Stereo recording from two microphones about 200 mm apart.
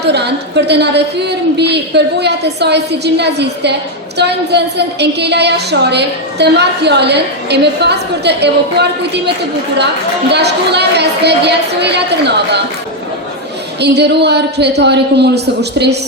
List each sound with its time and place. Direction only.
0.0 s a woman's voice: 55° right (ahead or behind)
13.8 s a woman's voice: 55° right (ahead or behind)